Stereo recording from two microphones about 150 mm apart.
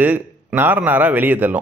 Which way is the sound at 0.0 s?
10° right (ahead or behind).